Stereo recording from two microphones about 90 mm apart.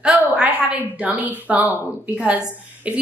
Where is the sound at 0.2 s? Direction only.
15° right (ahead or behind).